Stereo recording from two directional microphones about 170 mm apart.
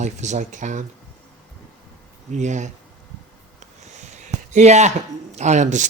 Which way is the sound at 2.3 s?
45° right (ahead or behind).